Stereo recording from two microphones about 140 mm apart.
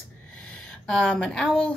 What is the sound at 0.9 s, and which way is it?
Speech, 5° left (ahead or behind).